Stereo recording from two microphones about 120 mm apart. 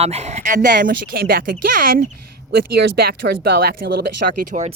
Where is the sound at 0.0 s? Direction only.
60° right (ahead or behind); by 0.7 s 90° right.